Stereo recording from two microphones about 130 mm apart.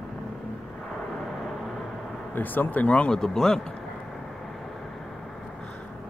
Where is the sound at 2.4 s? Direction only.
15° left (ahead or behind).